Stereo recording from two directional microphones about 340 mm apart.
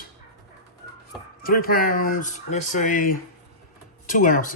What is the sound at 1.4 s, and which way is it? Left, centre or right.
Speech, left.